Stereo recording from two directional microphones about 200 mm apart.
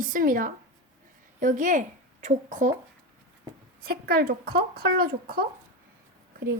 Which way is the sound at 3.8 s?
50° right (ahead or behind).